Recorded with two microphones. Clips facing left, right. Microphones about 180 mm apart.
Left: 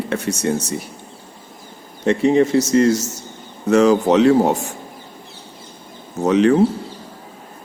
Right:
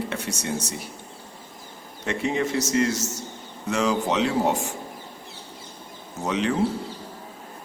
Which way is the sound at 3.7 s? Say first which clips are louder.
Left 10 dB; 45° left (ahead or behind).